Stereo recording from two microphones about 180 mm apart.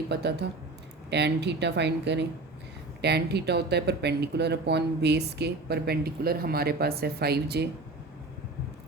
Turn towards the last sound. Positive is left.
turn(degrees=-65)  # may be behind; listen again after turning